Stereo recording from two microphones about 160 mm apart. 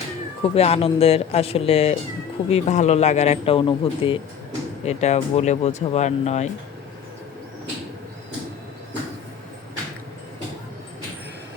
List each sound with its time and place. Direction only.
0.4 s speech: 40° left (ahead or behind)
4.9 s speech: 45° left (ahead or behind)